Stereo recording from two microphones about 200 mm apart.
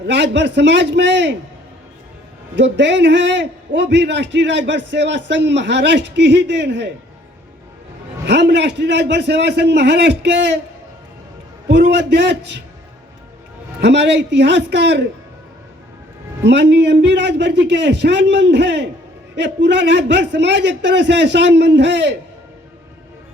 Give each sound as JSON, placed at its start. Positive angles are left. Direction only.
{"t": 0.1, "sound": "a man's voice", "side_deg": -60}
{"t": 2.6, "sound": "a man's voice", "side_deg": -60}
{"t": 8.3, "sound": "a man's voice", "side_deg": -60}
{"t": 11.7, "sound": "a man's voice", "side_deg": -60}
{"t": 13.8, "sound": "a man's voice", "side_deg": -60}
{"t": 16.4, "sound": "a man's voice", "side_deg": -60}